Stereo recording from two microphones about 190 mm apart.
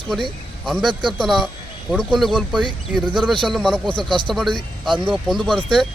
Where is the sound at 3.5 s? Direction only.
5° left (ahead or behind).